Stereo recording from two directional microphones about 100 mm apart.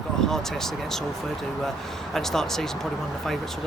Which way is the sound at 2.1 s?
5° left (ahead or behind).